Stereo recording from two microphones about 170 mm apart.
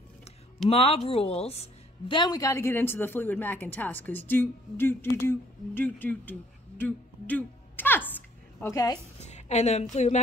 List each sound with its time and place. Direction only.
0.7 s a woman's voice: 35° left (ahead or behind); by 6.3 s 10° left (ahead or behind)
6.8 s a sound: 10° left (ahead or behind)
8.5 s a woman's voice: 15° left (ahead or behind)
9.2 s a woman's voice: 40° left (ahead or behind)